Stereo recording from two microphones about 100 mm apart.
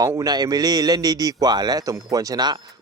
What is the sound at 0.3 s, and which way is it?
A man's voice, 40° right (ahead or behind).